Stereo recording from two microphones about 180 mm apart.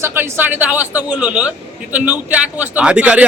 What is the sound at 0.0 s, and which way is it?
Speech, 15° right (ahead or behind).